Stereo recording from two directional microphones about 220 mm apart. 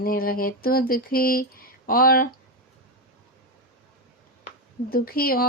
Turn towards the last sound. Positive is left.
turn(degrees=40)  # may be behind; listen again after turning